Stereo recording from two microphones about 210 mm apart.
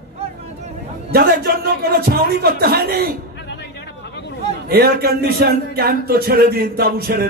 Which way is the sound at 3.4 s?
55° left (ahead or behind).